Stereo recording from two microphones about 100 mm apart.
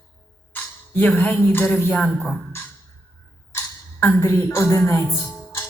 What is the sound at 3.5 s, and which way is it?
Speech, 25° left (ahead or behind).